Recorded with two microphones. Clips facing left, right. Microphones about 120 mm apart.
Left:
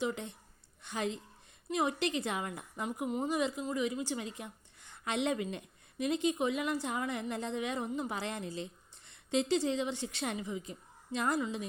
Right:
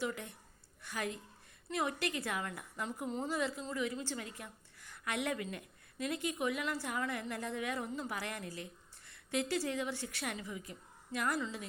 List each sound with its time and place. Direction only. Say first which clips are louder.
0.0 s a woman's voice: left 4 dB; 25° left (ahead or behind)